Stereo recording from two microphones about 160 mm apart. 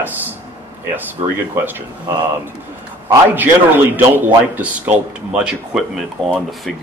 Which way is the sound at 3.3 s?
10° right (ahead or behind).